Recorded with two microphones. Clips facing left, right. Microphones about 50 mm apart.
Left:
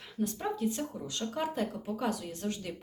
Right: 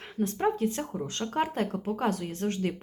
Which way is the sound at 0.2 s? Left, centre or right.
Right.